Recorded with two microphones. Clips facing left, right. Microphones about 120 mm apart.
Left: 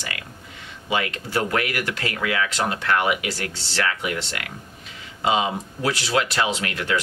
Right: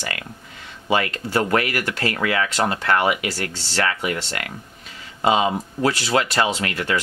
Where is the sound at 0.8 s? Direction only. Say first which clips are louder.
Right 4 dB; 40° right (ahead or behind).